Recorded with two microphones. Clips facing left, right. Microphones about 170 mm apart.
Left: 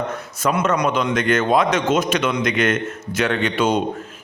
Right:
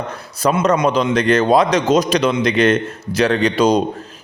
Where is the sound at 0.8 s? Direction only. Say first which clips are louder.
Right 4 dB; 30° right (ahead or behind).